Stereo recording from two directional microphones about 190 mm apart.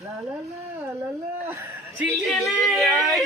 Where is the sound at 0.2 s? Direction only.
15° right (ahead or behind).